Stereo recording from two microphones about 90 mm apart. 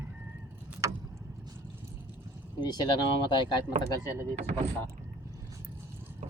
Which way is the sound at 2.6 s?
55° left (ahead or behind).